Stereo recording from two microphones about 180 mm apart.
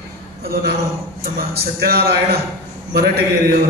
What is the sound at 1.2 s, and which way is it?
A man's voice, 60° right (ahead or behind).